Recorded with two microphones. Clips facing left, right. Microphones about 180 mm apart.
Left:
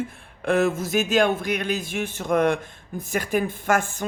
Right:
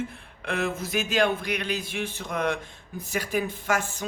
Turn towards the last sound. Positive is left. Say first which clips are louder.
# left 4 dB
turn(degrees=50)  # may be behind; listen again after turning